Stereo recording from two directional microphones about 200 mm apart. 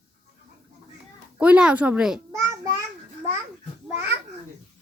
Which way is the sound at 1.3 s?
5° right (ahead or behind).